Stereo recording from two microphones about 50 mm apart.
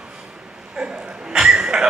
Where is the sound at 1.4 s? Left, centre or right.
Centre.